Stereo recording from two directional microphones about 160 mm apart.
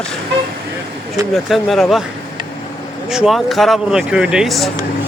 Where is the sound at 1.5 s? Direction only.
Centre (ahead or behind).